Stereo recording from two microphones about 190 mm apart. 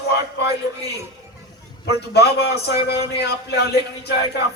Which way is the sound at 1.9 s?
60° left (ahead or behind).